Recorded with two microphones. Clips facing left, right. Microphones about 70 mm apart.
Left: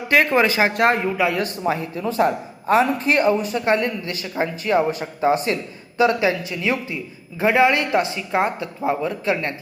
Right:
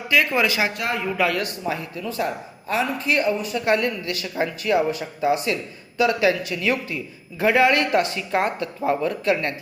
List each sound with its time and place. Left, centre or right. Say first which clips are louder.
0.1 s speech: left 3 dB; left
0.8 s speech: left 8 dB; left
1.1 s speech: left 1 dB; centre
1.6 s speech: left 5 dB; left